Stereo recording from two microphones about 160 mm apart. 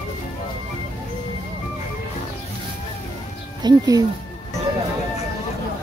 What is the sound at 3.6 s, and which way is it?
Speech, 25° right (ahead or behind).